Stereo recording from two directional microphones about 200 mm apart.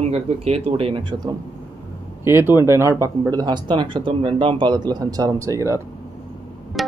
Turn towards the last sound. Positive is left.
turn(degrees=0)  # may be behind; listen again after turning